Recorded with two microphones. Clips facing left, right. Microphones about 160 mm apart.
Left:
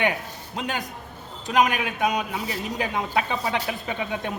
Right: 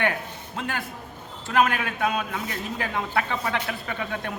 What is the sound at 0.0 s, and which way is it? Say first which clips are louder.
A man's voice: left 1 dB; 15° left (ahead or behind).